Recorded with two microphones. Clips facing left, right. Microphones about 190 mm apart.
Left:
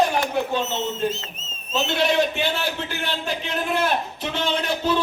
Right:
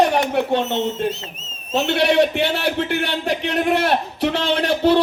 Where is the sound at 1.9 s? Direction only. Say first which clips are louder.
Right 5 dB; 65° right (ahead or behind).